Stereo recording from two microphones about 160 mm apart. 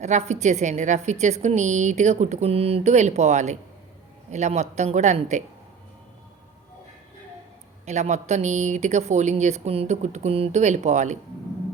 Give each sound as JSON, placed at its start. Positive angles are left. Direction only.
{"t": 0.0, "sound": "a woman's voice", "side_deg": -45}
{"t": 7.9, "sound": "a woman's voice", "side_deg": -45}